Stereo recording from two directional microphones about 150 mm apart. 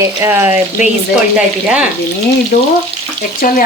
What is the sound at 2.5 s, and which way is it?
Frying, 85° left.